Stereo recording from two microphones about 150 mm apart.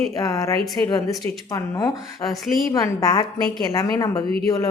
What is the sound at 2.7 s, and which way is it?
A woman's voice, 25° left (ahead or behind).